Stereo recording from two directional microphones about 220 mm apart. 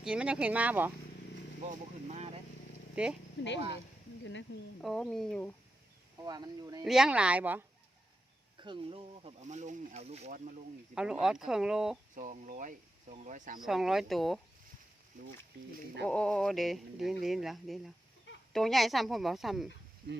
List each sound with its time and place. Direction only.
0.0 s speech: 5° right (ahead or behind)
2.0 s vehicle: 30° right (ahead or behind)
2.9 s speech: 5° right (ahead or behind)
3.4 s speech: 55° left (ahead or behind)
4.8 s speech: centre (ahead or behind)
6.2 s speech: 15° right (ahead or behind)
6.8 s speech: centre (ahead or behind)
8.5 s speech: 20° right (ahead or behind)
10.9 s speech: 5° right (ahead or behind)
12.1 s speech: 35° right (ahead or behind)
13.6 s speech: centre (ahead or behind)
16.0 s speech: 5° left (ahead or behind)
20.0 s speech: 40° right (ahead or behind)